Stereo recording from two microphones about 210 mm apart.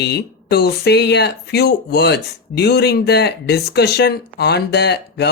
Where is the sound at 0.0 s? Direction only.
50° left (ahead or behind).